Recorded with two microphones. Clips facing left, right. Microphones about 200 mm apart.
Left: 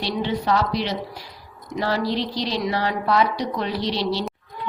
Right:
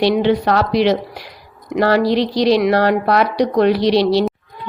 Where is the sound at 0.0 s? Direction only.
70° right (ahead or behind); by 0.9 s 90° right.